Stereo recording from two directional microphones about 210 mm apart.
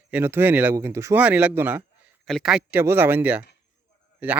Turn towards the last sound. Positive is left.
turn(degrees=-10)  # may be behind; listen again after turning